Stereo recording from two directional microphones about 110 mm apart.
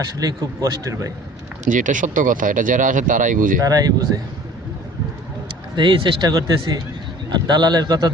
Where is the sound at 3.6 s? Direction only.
35° right (ahead or behind).